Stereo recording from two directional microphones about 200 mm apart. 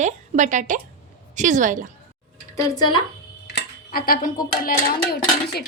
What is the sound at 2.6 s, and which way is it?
Speech, 20° left (ahead or behind).